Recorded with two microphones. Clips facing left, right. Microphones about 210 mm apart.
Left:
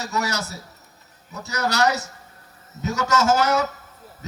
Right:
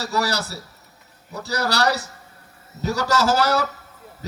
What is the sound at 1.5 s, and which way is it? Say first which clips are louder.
A man's voice: even; 35° right (ahead or behind).